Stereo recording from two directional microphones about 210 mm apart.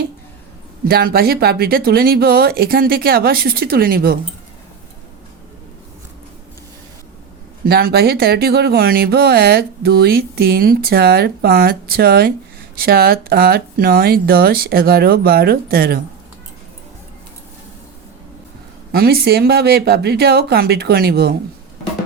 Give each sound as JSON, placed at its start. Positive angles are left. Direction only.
{"t": 0.9, "sound": "speech", "side_deg": -45}
{"t": 7.7, "sound": "speech", "side_deg": -50}
{"t": 18.9, "sound": "speech", "side_deg": -50}